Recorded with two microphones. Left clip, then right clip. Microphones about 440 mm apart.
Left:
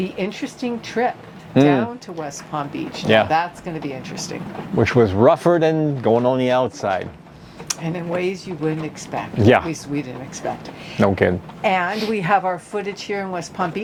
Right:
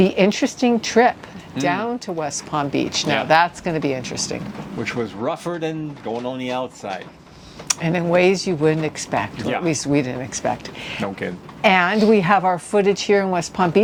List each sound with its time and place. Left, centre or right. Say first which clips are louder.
0.0 s speech: right 9 dB; right
4.8 s speech: left 11 dB; left
7.7 s speech: right 6 dB; right
11.0 s speech: left 12 dB; left
11.6 s speech: right 4 dB; right